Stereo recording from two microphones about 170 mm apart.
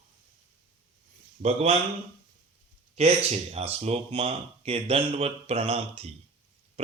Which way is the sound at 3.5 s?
35° right (ahead or behind).